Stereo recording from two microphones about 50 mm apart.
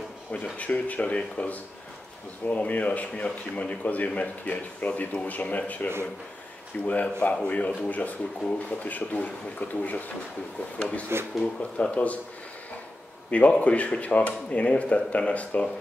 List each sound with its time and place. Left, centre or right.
0.3 s speech: left
6.9 s speech: left
13.3 s speech: left